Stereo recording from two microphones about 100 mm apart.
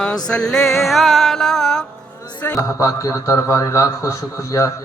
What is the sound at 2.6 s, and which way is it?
A man's voice, 30° left (ahead or behind).